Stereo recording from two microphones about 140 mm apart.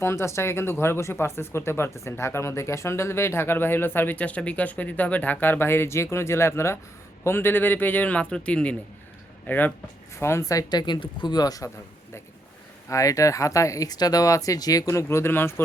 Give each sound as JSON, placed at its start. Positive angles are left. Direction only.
{"t": 0.0, "sound": "speech", "side_deg": 20}
{"t": 12.9, "sound": "speech", "side_deg": 25}